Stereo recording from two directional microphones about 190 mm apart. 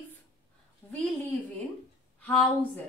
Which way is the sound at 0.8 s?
10° left (ahead or behind).